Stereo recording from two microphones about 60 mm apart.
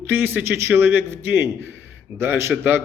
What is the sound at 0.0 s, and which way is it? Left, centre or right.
Speech, right.